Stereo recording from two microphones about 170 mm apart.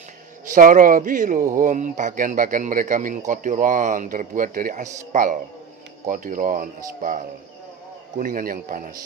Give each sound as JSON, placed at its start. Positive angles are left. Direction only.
{"t": 0.4, "sound": "a man's voice", "side_deg": -50}